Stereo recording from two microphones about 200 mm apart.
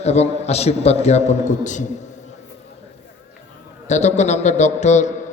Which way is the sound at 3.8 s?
35° left (ahead or behind).